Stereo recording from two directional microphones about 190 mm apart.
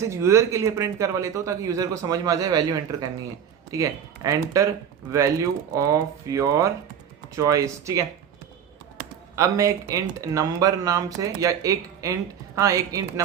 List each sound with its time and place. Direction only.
0.0 s speech: 15° right (ahead or behind)
5.7 s speech: 15° right (ahead or behind)
9.3 s speech: 15° right (ahead or behind)